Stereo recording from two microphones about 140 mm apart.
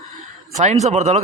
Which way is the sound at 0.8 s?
55° right (ahead or behind).